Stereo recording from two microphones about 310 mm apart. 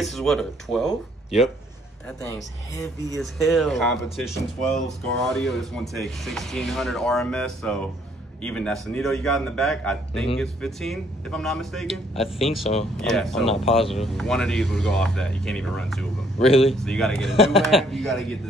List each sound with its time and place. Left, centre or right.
0.0 s speech: centre
2.0 s speech: centre
16.4 s speech: centre
16.7 s speech: centre